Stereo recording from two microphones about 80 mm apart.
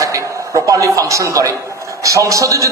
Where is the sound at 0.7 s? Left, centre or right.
Right.